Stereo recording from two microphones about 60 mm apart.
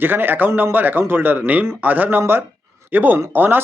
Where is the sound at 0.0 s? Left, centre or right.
Right.